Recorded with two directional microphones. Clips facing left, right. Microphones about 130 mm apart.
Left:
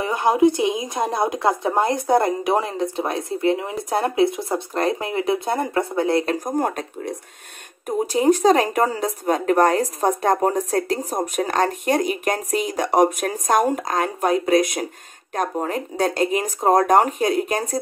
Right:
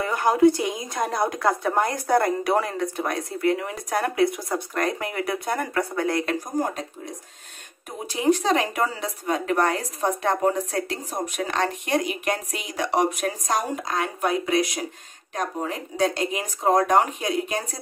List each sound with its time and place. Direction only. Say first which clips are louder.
0.0 s a woman's voice: left 1 dB; 20° left (ahead or behind)
6.4 s speech: left 4 dB; 55° left (ahead or behind)
7.8 s speech: left 5 dB; 45° left (ahead or behind)